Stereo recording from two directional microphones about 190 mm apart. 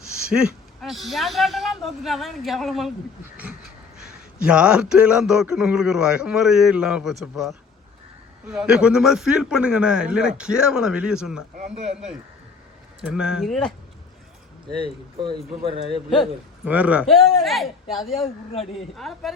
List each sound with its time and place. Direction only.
0.3 s speech: 5° right (ahead or behind)
4.0 s speech: 5° right (ahead or behind)
11.8 s speech: 35° right (ahead or behind)
13.0 s speech: 5° right (ahead or behind)
15.2 s speech: 25° right (ahead or behind)
16.6 s speech: 5° right (ahead or behind)
18.5 s speech: 30° left (ahead or behind)
18.9 s speech: centre (ahead or behind)